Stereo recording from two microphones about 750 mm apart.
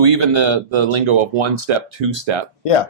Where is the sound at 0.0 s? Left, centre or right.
Right.